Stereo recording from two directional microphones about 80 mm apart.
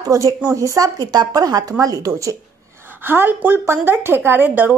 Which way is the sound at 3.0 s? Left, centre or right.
Right.